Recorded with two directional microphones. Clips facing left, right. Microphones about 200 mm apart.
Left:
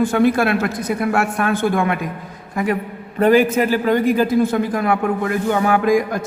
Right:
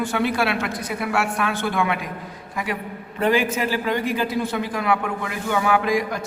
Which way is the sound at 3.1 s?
45° left (ahead or behind).